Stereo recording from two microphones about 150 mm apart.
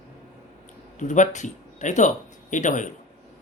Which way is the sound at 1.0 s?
55° left (ahead or behind).